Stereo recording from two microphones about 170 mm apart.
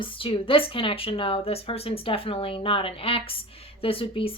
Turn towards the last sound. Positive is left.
turn(degrees=35)  # may be behind; listen again after turning